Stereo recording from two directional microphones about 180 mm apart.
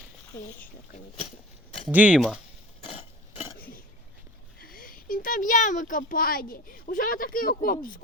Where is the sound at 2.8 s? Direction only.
35° left (ahead or behind).